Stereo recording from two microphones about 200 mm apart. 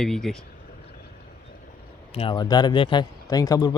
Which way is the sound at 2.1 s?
25° left (ahead or behind).